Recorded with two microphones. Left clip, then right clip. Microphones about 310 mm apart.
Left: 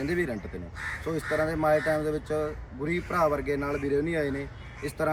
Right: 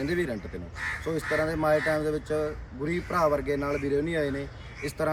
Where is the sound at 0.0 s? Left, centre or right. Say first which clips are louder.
Even; centre.